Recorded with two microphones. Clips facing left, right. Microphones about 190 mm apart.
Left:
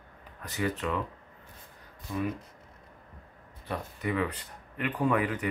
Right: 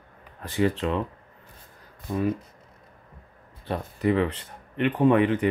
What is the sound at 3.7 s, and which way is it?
Speech, 30° right (ahead or behind).